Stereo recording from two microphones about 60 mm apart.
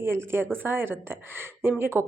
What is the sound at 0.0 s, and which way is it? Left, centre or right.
Speech, right.